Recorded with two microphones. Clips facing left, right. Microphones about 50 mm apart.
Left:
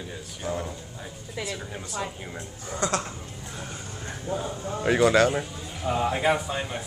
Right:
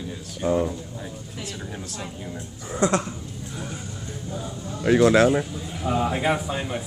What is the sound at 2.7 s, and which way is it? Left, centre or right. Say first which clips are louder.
Speech: right 5 dB; right.